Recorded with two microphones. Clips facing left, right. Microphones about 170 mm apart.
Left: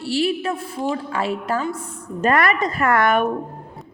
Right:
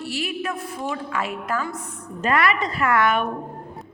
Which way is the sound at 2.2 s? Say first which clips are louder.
Left 3 dB; 45° left (ahead or behind).